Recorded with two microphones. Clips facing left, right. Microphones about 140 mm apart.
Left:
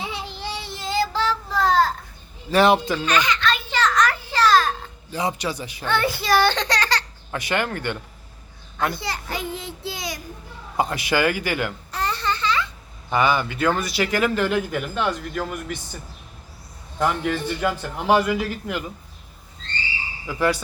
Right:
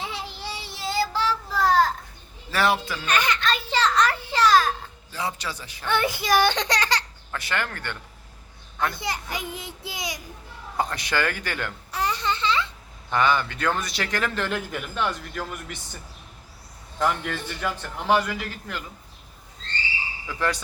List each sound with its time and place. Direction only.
0.0 s child singing: centre (ahead or behind)
1.5 s a sound: 5° right (ahead or behind)
2.5 s speech: 20° left (ahead or behind)
3.1 s a child's voice: 50° right (ahead or behind)
3.5 s a sound: 30° right (ahead or behind); by 4.7 s 15° right (ahead or behind)
5.1 s a man's voice: 15° left (ahead or behind)
5.9 s a child's voice: 15° right (ahead or behind)
7.3 s a man's voice: 15° left (ahead or behind)
9.0 s a child's voice: 15° right (ahead or behind)
10.8 s a man's voice: 10° left (ahead or behind)
11.9 s babbling: 10° right (ahead or behind)
13.1 s a man's voice: 10° left (ahead or behind)
17.0 s a man's voice: 10° left (ahead or behind)
20.2 s a man's voice: 10° left (ahead or behind)